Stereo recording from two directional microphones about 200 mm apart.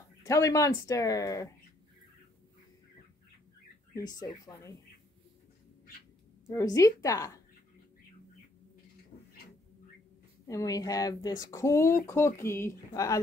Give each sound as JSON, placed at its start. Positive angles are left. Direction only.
{"t": 0.2, "sound": "speech", "side_deg": 15}
{"t": 3.9, "sound": "speech", "side_deg": 20}
{"t": 6.4, "sound": "speech", "side_deg": 15}
{"t": 10.4, "sound": "speech", "side_deg": 15}